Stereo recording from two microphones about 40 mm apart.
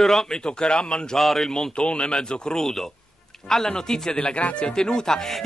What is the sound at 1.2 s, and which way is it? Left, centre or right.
Speech, centre.